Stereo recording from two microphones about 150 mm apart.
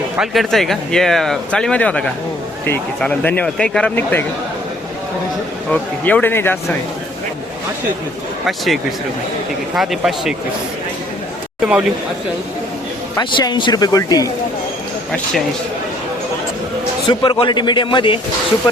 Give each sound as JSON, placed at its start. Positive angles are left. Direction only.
{"t": 0.2, "sound": "speech", "side_deg": 0}
{"t": 5.7, "sound": "speech", "side_deg": 10}
{"t": 8.4, "sound": "speech", "side_deg": 0}
{"t": 11.6, "sound": "speech", "side_deg": -5}
{"t": 13.1, "sound": "speech", "side_deg": 30}
{"t": 15.1, "sound": "speech", "side_deg": 5}
{"t": 17.1, "sound": "a man's voice", "side_deg": 35}